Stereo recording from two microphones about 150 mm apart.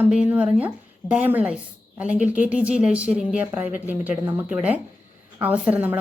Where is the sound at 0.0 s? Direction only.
10° right (ahead or behind).